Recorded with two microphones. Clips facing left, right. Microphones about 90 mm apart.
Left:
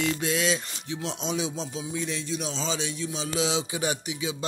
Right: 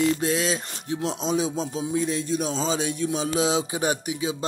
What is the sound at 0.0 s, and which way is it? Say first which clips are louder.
Music: right 4 dB; 35° right (ahead or behind).